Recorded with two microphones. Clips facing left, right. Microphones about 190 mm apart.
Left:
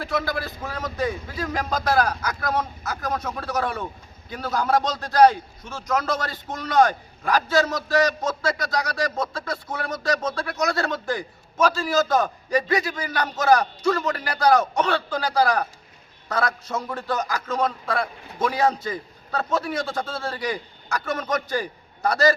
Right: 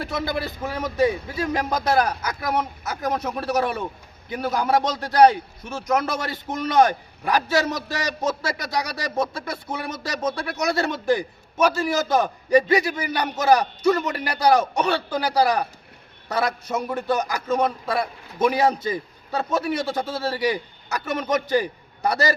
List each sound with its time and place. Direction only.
0.0 s a man's voice: 20° right (ahead or behind)